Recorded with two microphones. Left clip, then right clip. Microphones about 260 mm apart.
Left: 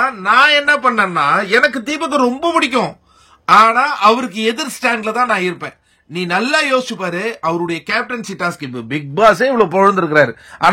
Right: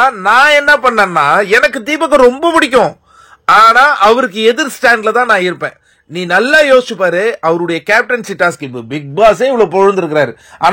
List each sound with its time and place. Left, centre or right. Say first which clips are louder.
0.0 s a man's voice: right 4 dB; centre
8.7 s speech: right 2 dB; centre
9.2 s speech: right 3 dB; left